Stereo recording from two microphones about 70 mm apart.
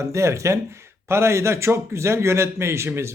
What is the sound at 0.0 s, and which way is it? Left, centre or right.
A man's voice, right.